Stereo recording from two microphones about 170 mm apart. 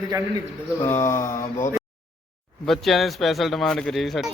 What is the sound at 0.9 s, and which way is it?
Speech, 15° left (ahead or behind).